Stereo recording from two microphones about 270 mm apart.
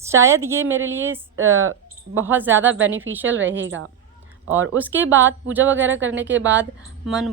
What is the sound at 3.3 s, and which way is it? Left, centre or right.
Speech, right.